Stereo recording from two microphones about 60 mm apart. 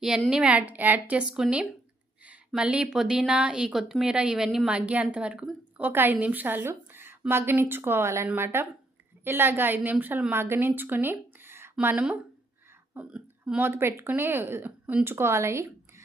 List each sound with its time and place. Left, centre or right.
0.3 s a woman's voice: centre
0.5 s a woman's voice: right
1.3 s a woman's voice: centre
2.6 s a woman's voice: centre
5.9 s a woman's voice: right
10.3 s a woman's voice: right
10.8 s a sound: right
13.1 s speech: centre
13.6 s a woman's voice: right